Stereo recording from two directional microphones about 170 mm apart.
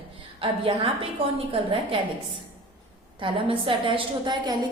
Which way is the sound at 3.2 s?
30° right (ahead or behind).